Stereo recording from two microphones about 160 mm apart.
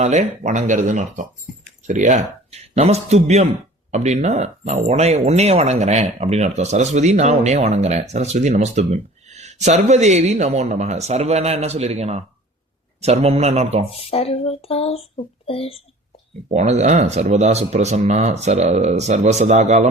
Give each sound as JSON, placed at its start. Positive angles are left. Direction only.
{"t": 0.0, "sound": "speech", "side_deg": -45}
{"t": 13.9, "sound": "speech", "side_deg": 40}
{"t": 16.5, "sound": "speech", "side_deg": -45}